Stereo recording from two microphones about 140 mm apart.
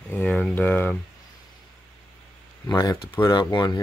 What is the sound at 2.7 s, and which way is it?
Speech, 25° left (ahead or behind).